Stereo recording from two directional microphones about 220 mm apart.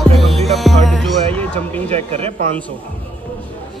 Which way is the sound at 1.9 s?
25° right (ahead or behind).